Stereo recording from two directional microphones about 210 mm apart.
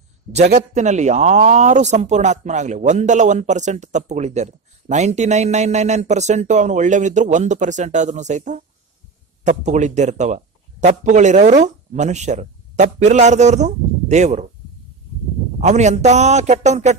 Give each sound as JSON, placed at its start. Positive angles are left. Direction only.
{"t": 0.3, "sound": "speech", "side_deg": -35}
{"t": 15.6, "sound": "speech", "side_deg": -35}